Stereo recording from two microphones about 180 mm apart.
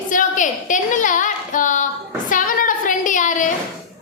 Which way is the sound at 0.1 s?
45° left (ahead or behind).